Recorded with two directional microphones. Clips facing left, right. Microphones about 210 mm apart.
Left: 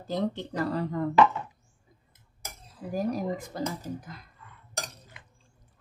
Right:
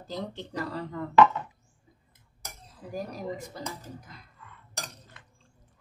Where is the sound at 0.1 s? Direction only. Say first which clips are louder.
Left 6 dB; 50° left (ahead or behind).